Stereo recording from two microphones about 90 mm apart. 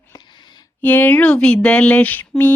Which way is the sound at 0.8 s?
20° left (ahead or behind).